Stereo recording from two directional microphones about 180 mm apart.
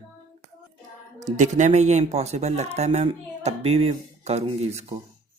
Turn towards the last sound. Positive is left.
turn(degrees=-35)  # may be behind; listen again after turning